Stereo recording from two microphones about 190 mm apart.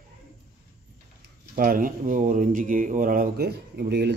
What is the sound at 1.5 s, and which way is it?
A man's voice, 50° right (ahead or behind).